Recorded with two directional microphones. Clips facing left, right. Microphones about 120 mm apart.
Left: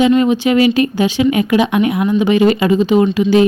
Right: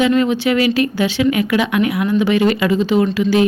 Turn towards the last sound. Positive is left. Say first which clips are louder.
# left 3 dB
turn(degrees=20)  # may be behind; listen again after turning